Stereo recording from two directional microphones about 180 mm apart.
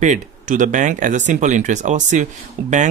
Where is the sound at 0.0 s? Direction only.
45° right (ahead or behind).